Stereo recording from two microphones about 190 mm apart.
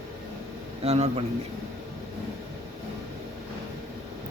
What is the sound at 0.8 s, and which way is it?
Speech, 35° right (ahead or behind).